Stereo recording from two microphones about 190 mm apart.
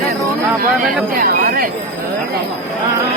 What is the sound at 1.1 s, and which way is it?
Speech, 50° right (ahead or behind).